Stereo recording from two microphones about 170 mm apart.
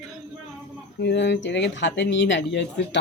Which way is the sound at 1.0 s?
85° left.